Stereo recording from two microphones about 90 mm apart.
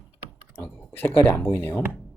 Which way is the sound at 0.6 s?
25° left (ahead or behind).